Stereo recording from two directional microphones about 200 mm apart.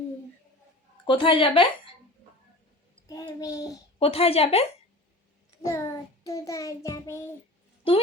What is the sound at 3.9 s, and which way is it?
Speech, 30° left (ahead or behind).